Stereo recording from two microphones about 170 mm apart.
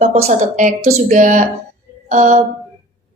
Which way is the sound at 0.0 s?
45° right (ahead or behind).